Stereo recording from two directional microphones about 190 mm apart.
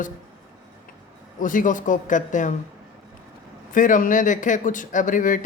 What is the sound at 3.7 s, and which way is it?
Speech, 45° left (ahead or behind).